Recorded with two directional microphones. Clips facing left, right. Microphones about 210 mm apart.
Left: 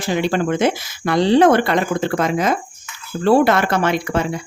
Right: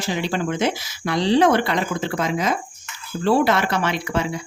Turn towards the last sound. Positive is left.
turn(degrees=50)  # may be behind; listen again after turning